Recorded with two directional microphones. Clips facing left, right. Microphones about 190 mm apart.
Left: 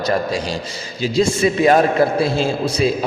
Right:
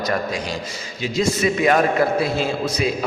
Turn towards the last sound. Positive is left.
turn(degrees=30)  # may be behind; listen again after turning